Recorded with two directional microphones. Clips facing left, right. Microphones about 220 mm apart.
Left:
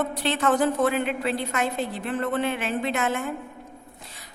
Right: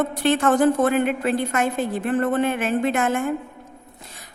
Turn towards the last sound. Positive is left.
turn(degrees=-50)  # may be behind; listen again after turning